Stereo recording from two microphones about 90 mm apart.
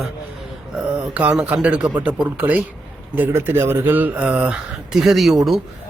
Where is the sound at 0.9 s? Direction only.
15° right (ahead or behind).